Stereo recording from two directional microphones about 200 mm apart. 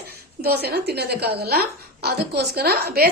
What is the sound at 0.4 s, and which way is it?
A woman's voice, 50° right (ahead or behind).